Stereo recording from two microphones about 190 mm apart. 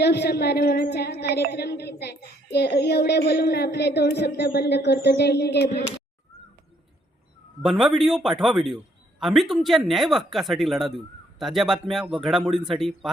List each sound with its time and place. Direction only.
0.0 s a woman's voice: 60° left (ahead or behind)
7.6 s speech: centre (ahead or behind)